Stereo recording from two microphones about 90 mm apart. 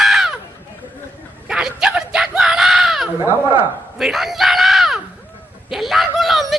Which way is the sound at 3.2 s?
25° right (ahead or behind).